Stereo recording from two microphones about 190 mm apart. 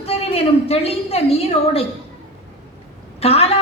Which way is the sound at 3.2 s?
30° left (ahead or behind).